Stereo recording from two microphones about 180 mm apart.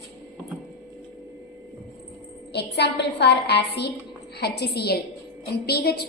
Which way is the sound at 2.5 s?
65° left (ahead or behind).